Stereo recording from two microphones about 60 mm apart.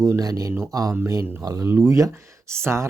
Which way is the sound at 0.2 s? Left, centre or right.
Right.